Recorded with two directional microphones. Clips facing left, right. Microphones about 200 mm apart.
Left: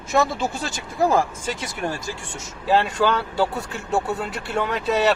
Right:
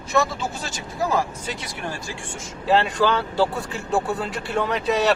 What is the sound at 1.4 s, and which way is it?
Speech, 45° left (ahead or behind).